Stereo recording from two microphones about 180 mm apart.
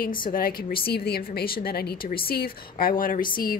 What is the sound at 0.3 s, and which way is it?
A woman's voice, 55° left (ahead or behind).